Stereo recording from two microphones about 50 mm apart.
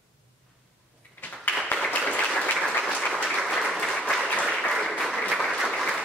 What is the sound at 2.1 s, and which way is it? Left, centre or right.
Applause, left.